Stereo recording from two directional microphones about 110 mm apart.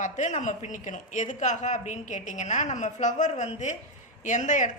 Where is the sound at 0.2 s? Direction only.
90° left.